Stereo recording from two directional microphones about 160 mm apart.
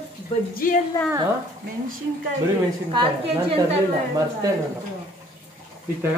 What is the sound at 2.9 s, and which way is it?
Speech, 30° right (ahead or behind).